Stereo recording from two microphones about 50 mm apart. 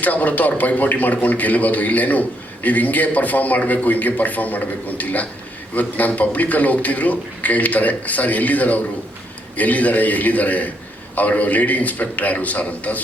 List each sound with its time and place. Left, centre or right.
0.0 s speech: left